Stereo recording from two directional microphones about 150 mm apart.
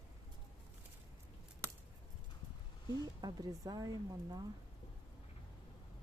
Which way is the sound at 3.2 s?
25° right (ahead or behind).